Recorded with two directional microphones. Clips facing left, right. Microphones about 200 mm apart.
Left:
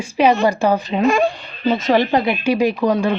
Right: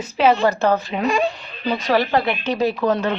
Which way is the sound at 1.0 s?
50° left (ahead or behind).